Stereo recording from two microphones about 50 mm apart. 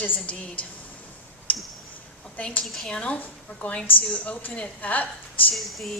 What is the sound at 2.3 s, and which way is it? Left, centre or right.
Speech, left.